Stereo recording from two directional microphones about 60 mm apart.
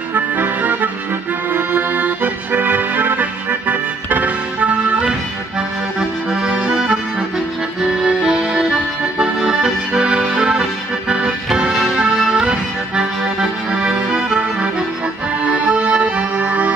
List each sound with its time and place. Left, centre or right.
0.1 s accordion: right